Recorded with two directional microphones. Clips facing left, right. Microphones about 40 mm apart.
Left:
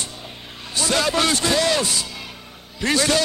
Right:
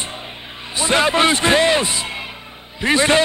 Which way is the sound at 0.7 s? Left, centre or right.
Right.